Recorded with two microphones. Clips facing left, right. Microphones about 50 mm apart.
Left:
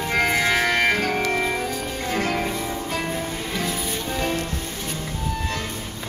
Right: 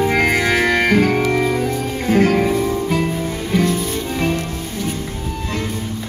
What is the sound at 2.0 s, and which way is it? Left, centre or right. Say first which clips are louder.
Music: right 10 dB; right.